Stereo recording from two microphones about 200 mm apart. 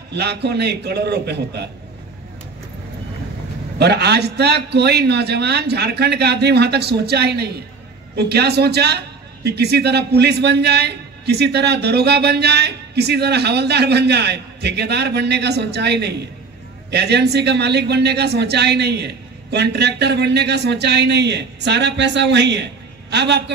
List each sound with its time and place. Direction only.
0.1 s a man's voice: 55° right (ahead or behind)
3.7 s a man's voice: 55° right (ahead or behind)